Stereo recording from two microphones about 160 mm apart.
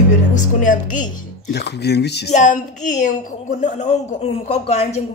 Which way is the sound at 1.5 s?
90° left.